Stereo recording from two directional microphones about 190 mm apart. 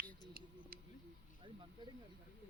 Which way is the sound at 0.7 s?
50° right (ahead or behind).